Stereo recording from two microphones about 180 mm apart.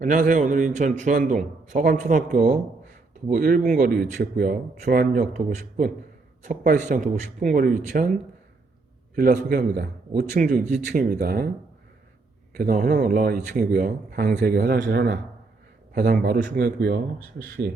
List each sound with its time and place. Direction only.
0.0 s speech: 45° right (ahead or behind)
9.1 s speech: 50° right (ahead or behind)
12.5 s speech: 50° right (ahead or behind)